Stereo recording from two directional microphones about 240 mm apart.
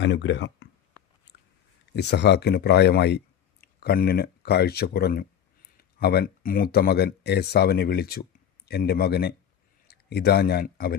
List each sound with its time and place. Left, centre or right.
0.0 s speech: left
1.9 s speech: left